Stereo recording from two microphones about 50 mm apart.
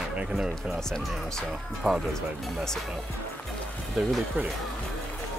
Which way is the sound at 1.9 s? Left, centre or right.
Centre.